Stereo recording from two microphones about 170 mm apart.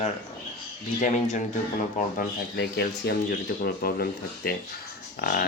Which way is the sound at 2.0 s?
50° left (ahead or behind).